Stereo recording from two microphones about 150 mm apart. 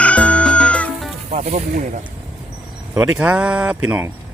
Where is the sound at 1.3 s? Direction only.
50° right (ahead or behind).